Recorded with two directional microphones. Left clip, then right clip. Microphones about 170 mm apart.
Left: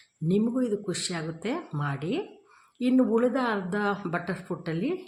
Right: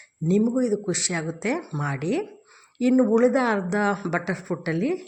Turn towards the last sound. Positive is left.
turn(degrees=-20)  # may be behind; listen again after turning